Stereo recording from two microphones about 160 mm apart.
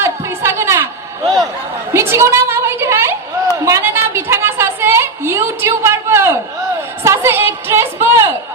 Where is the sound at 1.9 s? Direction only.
15° right (ahead or behind).